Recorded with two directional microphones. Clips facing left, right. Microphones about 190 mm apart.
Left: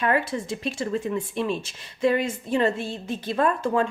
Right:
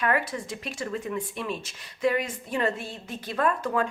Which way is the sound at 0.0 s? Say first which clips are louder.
Left 3 dB; 25° left (ahead or behind).